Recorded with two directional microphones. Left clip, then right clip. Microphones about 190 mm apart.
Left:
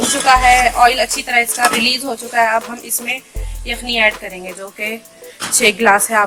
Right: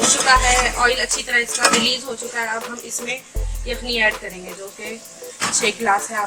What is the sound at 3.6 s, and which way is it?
Speech, 45° left (ahead or behind).